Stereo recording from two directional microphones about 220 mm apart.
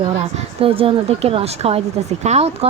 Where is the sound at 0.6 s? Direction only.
25° right (ahead or behind).